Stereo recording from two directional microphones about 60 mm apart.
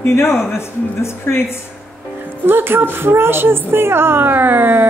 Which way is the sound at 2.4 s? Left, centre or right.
Right.